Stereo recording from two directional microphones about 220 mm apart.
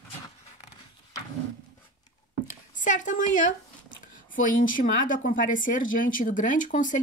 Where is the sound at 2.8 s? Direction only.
35° left (ahead or behind).